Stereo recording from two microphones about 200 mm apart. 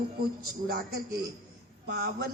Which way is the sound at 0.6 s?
50° right (ahead or behind).